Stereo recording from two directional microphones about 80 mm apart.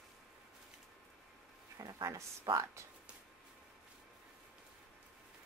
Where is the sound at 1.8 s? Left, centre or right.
Right.